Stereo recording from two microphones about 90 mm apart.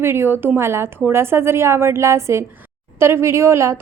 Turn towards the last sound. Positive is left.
turn(degrees=-30)  # may be behind; listen again after turning